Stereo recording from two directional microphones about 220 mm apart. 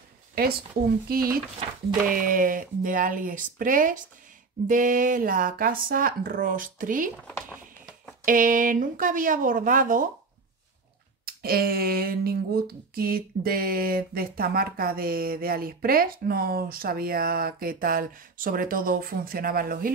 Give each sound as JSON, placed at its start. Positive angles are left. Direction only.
{"t": 1.0, "sound": "speech", "side_deg": -40}
{"t": 8.3, "sound": "speech", "side_deg": -40}
{"t": 11.2, "sound": "a sound", "side_deg": -45}